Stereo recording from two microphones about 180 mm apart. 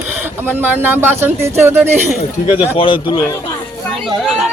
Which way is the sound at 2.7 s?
30° left (ahead or behind).